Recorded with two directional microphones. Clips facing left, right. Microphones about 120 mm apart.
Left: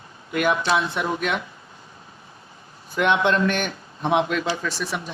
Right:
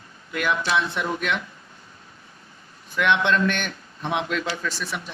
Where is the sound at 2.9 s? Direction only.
35° left (ahead or behind).